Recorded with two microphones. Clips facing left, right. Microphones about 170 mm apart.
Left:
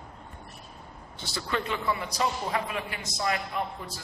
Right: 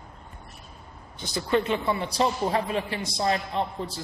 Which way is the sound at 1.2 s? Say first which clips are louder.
Right 7 dB; 20° right (ahead or behind).